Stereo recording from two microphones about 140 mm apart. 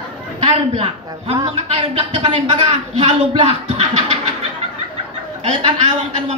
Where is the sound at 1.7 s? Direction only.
45° right (ahead or behind).